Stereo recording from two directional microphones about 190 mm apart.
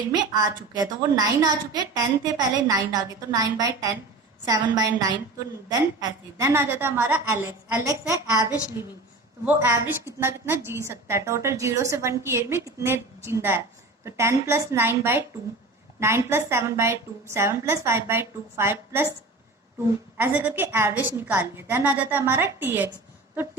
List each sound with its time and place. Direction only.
0.1 s a woman's voice: 20° right (ahead or behind)
9.6 s a woman's voice: 15° right (ahead or behind)
20.1 s a woman's voice: 10° right (ahead or behind)